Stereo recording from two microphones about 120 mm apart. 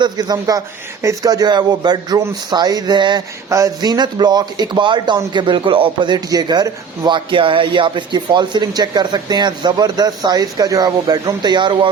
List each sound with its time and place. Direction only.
0.0 s speech: 30° right (ahead or behind)
6.1 s speech: 35° right (ahead or behind)